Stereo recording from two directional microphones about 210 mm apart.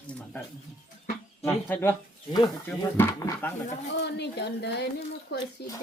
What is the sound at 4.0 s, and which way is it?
Speech, 55° left (ahead or behind).